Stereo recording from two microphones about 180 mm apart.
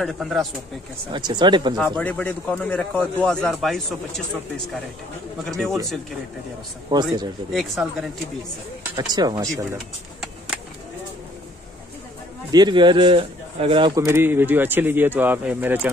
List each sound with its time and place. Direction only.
0.0 s a man's voice: centre (ahead or behind)
1.1 s speech: 25° right (ahead or behind)
2.0 s a man's voice: 5° left (ahead or behind)
5.4 s a man's voice: centre (ahead or behind)
6.9 s speech: 25° right (ahead or behind)
7.5 s a man's voice: centre (ahead or behind)
9.4 s speech: 20° right (ahead or behind)
12.4 s speech: 25° right (ahead or behind)
13.9 s speech: 15° right (ahead or behind)